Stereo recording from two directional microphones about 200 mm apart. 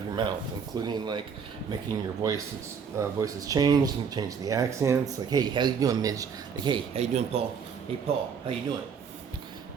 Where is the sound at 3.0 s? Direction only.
15° right (ahead or behind).